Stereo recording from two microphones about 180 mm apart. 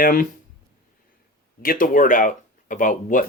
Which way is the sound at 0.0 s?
50° left (ahead or behind).